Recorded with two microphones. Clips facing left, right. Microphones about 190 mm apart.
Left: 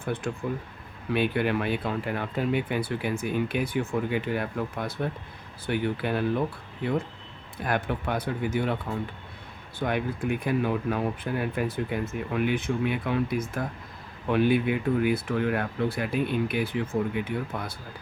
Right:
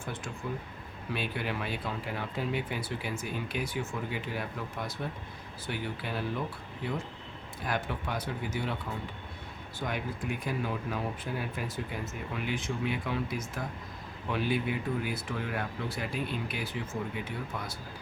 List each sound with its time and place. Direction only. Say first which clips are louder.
0.0 s speech: left 8 dB; 60° left (ahead or behind)